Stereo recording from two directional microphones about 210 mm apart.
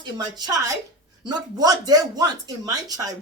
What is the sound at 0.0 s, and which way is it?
Speech, 20° right (ahead or behind).